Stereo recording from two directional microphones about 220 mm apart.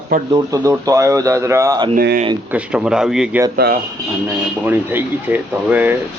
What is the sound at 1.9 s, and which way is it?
Speech, 45° right (ahead or behind).